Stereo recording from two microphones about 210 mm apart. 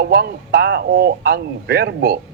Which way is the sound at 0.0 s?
50° right (ahead or behind).